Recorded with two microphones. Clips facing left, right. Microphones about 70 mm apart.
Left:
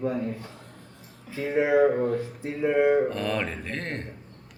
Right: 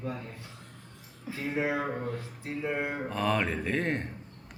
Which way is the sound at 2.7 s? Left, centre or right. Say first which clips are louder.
Left 13 dB; centre.